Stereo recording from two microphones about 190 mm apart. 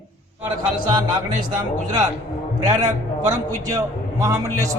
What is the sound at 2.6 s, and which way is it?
A man's voice, 20° right (ahead or behind).